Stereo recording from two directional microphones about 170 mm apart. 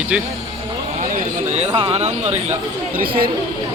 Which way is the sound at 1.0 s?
50° right (ahead or behind).